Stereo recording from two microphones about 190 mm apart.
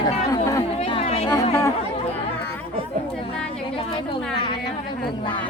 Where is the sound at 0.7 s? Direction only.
30° left (ahead or behind).